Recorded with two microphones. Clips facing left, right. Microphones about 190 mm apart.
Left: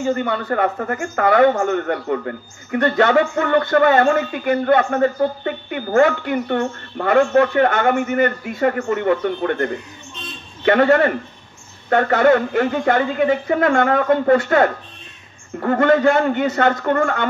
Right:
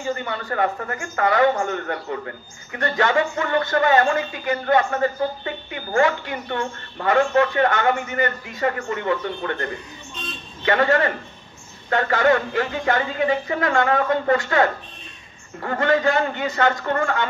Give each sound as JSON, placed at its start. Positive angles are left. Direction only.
{"t": 0.0, "sound": "speech", "side_deg": 55}
{"t": 10.6, "sound": "speech", "side_deg": 50}